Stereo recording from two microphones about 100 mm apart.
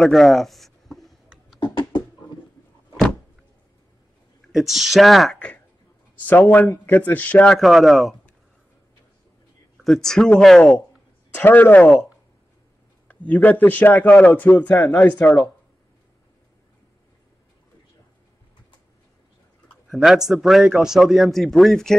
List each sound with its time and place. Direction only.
0.0 s a sound: centre (ahead or behind)
1.6 s a sound: 50° left (ahead or behind)
4.5 s a man's voice: centre (ahead or behind)
6.1 s a man's voice: 15° left (ahead or behind)
7.5 s a man's voice: centre (ahead or behind)
9.8 s a man's voice: 5° left (ahead or behind)
11.3 s a man's voice: 20° left (ahead or behind)
13.1 s a man's voice: 15° left (ahead or behind)
19.9 s a man's voice: 5° right (ahead or behind)